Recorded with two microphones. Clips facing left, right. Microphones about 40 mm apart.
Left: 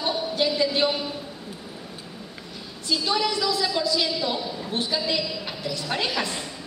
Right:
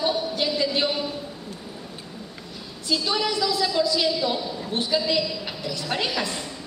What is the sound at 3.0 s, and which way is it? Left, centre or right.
Speech, centre.